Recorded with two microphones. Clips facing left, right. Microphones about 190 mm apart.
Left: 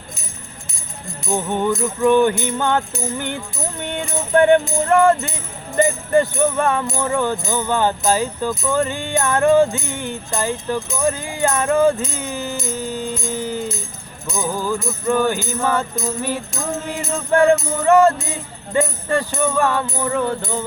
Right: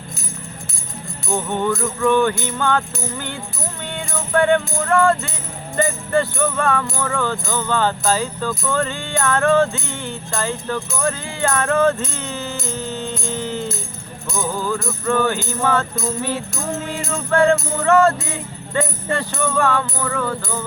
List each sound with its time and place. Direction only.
1.3 s speech: 15° left (ahead or behind)
3.8 s music: 20° left (ahead or behind)
5.7 s speech: 15° left (ahead or behind)
13.3 s music: 10° left (ahead or behind)
14.3 s speech: 10° left (ahead or behind)